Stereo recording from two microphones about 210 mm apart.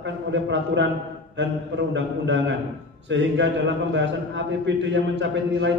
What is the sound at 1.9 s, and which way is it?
A man's voice, 60° right (ahead or behind).